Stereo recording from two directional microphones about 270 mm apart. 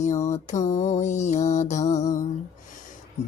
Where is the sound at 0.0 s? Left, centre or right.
Left.